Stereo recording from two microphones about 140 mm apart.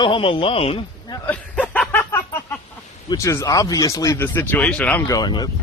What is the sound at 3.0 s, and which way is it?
Speech, 25° left (ahead or behind).